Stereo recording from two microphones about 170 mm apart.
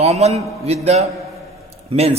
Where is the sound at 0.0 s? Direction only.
40° right (ahead or behind).